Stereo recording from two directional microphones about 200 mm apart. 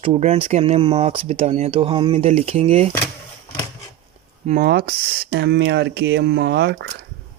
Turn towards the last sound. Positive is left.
turn(degrees=-60)  # may be behind; listen again after turning